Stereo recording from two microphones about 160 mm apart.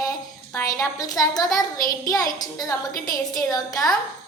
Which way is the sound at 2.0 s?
25° left (ahead or behind).